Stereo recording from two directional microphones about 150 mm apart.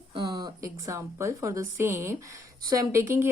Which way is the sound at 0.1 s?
30° right (ahead or behind).